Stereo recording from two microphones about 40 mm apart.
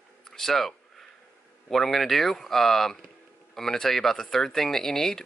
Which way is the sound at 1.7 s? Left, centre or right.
Centre.